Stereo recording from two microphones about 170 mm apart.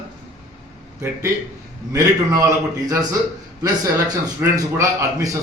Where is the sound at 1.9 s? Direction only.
20° right (ahead or behind).